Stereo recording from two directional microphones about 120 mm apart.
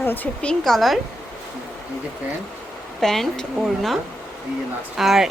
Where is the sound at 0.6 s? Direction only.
Centre (ahead or behind).